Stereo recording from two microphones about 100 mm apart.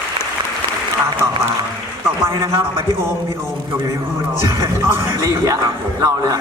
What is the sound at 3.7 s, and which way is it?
A man's voice, 35° right (ahead or behind).